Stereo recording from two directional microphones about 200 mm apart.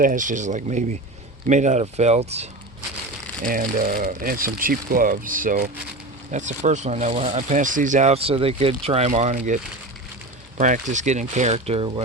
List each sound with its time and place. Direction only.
0.0 s speech: 40° right (ahead or behind)
3.4 s speech: 45° right (ahead or behind)
10.6 s speech: 40° right (ahead or behind)